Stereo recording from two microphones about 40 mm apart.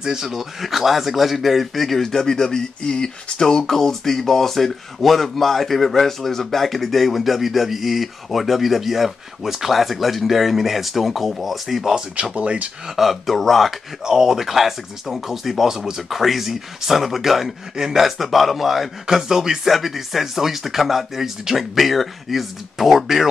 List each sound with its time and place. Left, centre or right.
0.0 s a man's voice: centre
11.9 s speech: right
12.8 s a man's voice: centre
14.0 s a man's voice: centre